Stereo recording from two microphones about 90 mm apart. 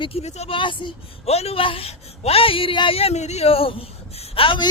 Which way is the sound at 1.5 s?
90° left.